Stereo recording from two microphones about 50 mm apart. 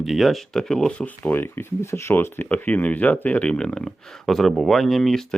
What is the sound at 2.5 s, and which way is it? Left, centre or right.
Speech, left.